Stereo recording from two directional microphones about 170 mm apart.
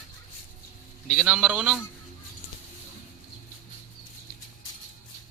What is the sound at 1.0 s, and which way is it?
Speech, 5° right (ahead or behind).